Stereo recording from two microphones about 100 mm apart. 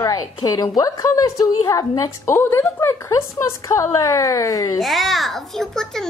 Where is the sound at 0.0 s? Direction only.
40° left (ahead or behind).